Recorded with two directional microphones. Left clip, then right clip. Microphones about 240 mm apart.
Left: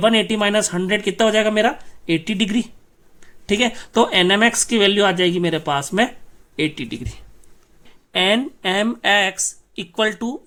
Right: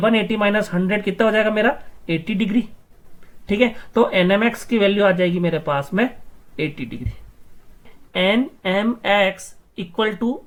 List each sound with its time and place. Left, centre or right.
0.0 s speech: left
8.1 s speech: left